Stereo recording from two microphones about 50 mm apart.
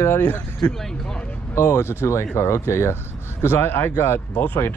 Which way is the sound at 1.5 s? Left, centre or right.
Left.